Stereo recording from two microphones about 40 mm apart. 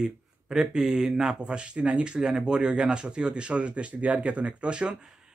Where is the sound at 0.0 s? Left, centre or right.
Centre.